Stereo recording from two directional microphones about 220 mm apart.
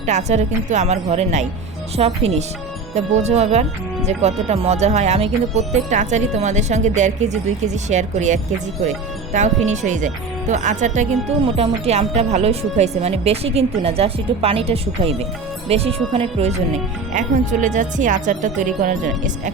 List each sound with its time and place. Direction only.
0.0 s a woman's voice: 30° right (ahead or behind)